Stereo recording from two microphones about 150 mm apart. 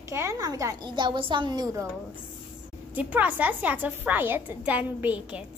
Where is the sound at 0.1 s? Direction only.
20° right (ahead or behind).